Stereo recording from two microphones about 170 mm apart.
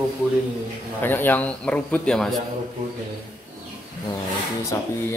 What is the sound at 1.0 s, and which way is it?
Speech, 10° left (ahead or behind).